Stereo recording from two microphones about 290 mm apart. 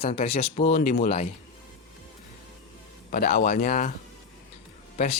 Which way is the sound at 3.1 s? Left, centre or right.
Left.